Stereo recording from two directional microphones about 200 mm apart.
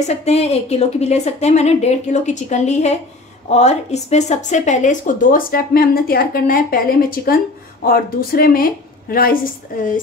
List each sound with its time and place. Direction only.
0.0 s a woman's voice: 35° left (ahead or behind)